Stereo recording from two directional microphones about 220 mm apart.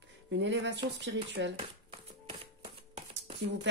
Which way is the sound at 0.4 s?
55° right (ahead or behind).